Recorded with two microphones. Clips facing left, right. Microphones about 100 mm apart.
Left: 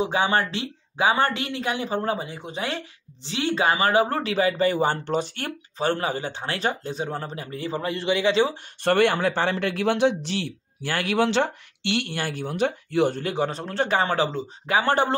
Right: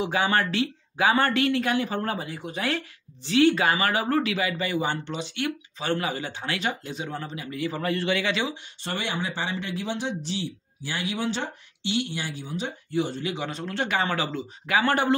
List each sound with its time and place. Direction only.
0.0 s speech: 25° left (ahead or behind)
8.8 s speech: 65° left (ahead or behind); by 15.1 s 30° left (ahead or behind)